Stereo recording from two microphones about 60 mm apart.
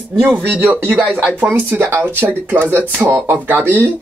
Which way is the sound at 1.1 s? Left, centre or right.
Right.